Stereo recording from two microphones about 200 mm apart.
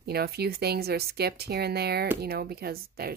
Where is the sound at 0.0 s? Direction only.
50° right (ahead or behind).